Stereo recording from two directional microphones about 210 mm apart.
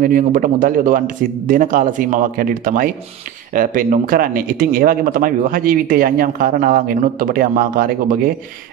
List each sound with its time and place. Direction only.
0.0 s speech: 40° right (ahead or behind)